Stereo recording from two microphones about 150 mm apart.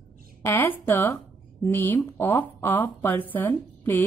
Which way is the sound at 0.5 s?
15° left (ahead or behind).